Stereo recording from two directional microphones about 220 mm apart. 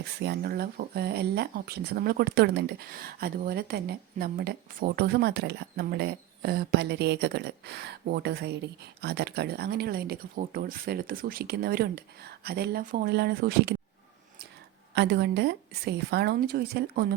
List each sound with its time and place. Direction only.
0.2 s speech: 50° right (ahead or behind)
14.9 s speech: 50° right (ahead or behind)